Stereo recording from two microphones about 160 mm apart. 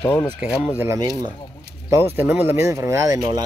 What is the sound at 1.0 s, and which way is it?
Speech, 25° right (ahead or behind).